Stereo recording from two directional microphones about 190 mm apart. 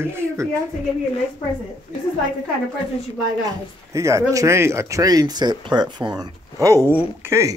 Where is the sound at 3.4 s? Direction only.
15° right (ahead or behind).